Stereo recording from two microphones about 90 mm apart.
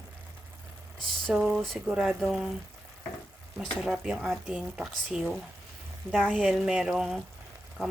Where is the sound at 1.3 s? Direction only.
10° right (ahead or behind).